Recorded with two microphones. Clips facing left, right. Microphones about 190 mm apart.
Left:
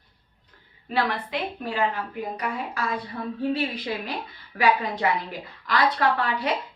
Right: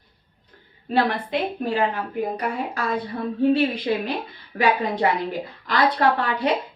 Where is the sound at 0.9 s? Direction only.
30° right (ahead or behind).